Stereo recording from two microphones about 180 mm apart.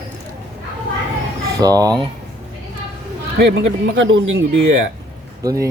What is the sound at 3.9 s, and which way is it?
Speech, 90° right.